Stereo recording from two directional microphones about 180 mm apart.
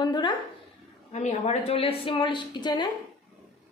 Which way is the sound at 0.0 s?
25° left (ahead or behind).